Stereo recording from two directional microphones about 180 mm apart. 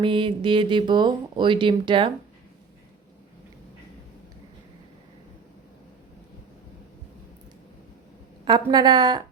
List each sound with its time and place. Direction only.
0.0 s speech: 25° right (ahead or behind)
8.4 s speech: 25° right (ahead or behind)